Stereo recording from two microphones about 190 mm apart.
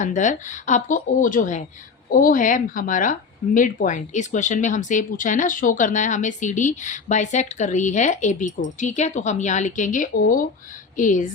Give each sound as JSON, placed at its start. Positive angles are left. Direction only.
{"t": 0.0, "sound": "speech", "side_deg": 40}